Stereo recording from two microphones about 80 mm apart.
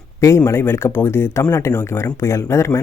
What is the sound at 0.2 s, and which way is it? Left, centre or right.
Speech, left.